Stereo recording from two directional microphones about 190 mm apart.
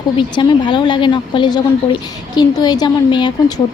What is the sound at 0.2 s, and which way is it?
Speech, 25° left (ahead or behind).